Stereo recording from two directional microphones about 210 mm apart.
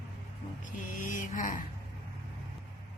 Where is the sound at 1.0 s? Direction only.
40° left (ahead or behind).